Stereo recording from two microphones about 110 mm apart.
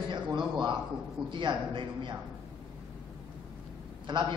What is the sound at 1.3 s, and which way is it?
Speech, 50° right (ahead or behind).